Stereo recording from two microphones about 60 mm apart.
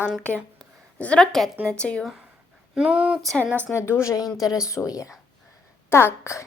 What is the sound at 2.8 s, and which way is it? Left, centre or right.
Speech, centre.